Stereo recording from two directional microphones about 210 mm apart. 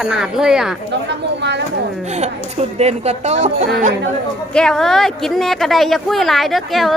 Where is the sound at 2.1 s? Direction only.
35° right (ahead or behind).